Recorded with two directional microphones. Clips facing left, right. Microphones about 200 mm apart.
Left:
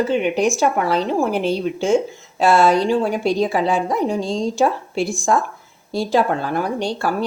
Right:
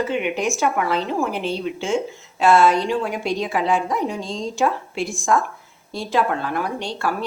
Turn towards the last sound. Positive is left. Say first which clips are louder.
# left 4 dB
turn(degrees=35)  # may be behind; listen again after turning